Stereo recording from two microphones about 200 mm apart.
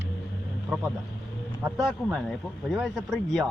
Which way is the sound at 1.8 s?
Centre (ahead or behind).